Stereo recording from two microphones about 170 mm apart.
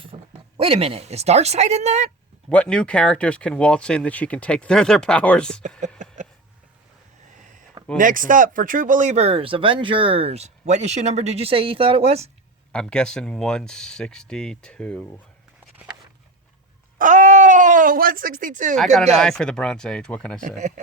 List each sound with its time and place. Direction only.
0.0 s speech: 30° right (ahead or behind)
2.5 s speech: 5° left (ahead or behind)
6.0 s a sound: 45° right (ahead or behind)
7.9 s speech: 50° right (ahead or behind)
12.7 s speech: 5° left (ahead or behind)
17.0 s speech: 45° right (ahead or behind)
19.1 s speech: 5° left (ahead or behind)
20.6 s speech: 45° right (ahead or behind)